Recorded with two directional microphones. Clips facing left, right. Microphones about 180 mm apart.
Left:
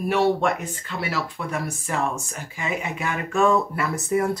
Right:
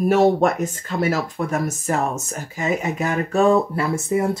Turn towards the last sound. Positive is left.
turn(degrees=-25)  # may be behind; listen again after turning